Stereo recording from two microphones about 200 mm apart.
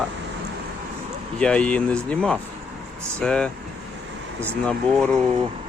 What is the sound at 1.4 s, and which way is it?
Speech, 5° left (ahead or behind).